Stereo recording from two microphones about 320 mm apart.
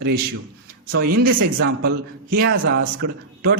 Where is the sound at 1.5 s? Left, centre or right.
Right.